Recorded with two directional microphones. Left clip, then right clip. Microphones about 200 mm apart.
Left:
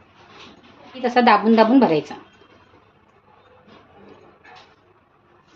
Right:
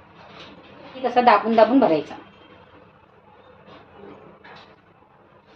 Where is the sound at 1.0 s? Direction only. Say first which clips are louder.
Left 1 dB; 50° left (ahead or behind).